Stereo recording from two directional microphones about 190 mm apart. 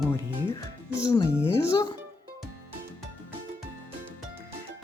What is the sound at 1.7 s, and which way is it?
Music, 20° left (ahead or behind).